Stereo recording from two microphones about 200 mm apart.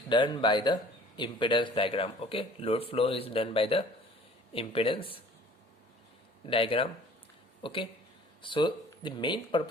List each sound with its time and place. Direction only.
0.1 s speech: 25° left (ahead or behind)
6.4 s speech: 25° left (ahead or behind)